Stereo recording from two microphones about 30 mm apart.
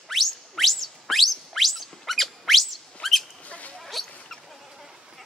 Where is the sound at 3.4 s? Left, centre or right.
Left.